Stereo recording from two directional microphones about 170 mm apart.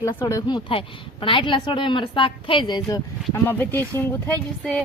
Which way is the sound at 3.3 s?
10° left (ahead or behind).